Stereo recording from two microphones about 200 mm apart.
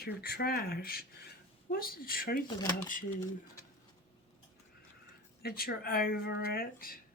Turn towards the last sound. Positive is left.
turn(degrees=45)  # may be behind; listen again after turning